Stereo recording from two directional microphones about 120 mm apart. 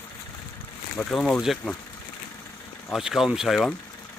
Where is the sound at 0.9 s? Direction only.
5° left (ahead or behind).